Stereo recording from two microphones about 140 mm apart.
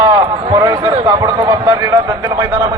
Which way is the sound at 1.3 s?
35° right (ahead or behind).